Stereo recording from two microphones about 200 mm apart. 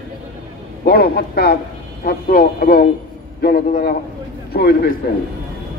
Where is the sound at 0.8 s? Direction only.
50° left (ahead or behind).